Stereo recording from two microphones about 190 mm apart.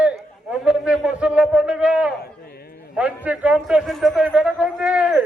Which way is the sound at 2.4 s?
55° left (ahead or behind).